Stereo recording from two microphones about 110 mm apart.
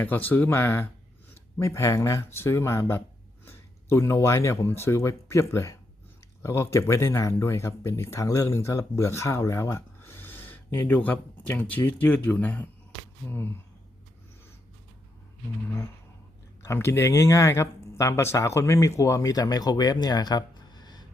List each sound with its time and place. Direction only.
0.0 s speech: 15° left (ahead or behind)
16.6 s speech: 25° left (ahead or behind); by 21.1 s 40° left (ahead or behind)